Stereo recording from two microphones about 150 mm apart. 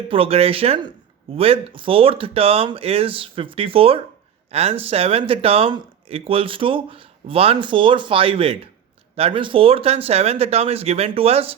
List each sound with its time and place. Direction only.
0.1 s speech: 40° right (ahead or behind)